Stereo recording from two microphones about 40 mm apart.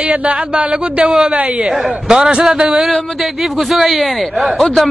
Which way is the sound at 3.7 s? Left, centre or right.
Centre.